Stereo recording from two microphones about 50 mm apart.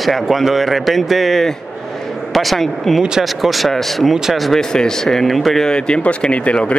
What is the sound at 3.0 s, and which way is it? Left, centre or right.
Speech, centre.